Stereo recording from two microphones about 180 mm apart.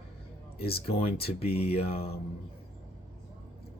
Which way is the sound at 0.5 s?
60° left (ahead or behind).